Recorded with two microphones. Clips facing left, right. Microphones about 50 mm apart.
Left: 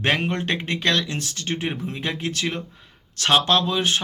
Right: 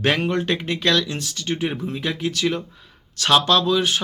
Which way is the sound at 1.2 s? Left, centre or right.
Left.